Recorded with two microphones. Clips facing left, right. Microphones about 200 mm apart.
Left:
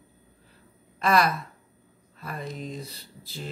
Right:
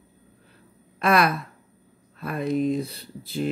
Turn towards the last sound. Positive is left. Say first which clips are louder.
# right 12 dB
turn(degrees=-60)  # may be behind; listen again after turning